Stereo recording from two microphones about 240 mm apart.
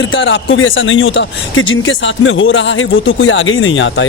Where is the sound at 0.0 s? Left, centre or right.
Left.